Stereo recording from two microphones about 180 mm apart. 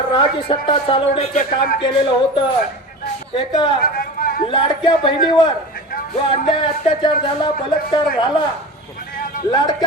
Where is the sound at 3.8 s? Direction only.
55° left (ahead or behind).